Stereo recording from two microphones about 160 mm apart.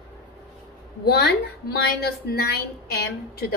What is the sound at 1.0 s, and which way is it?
A woman's voice, 90° left.